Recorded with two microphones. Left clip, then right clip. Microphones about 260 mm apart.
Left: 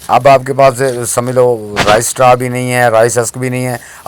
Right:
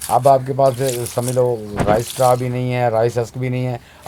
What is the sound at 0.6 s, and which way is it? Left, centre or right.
Speech, left.